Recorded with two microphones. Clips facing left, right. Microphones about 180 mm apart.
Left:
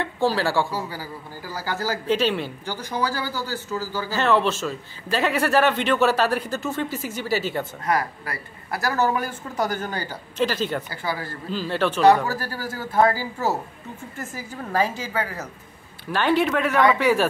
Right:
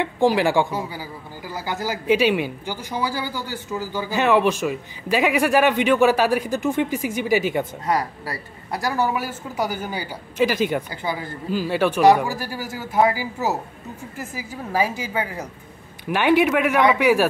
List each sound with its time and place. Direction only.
0.0 s speech: 15° right (ahead or behind)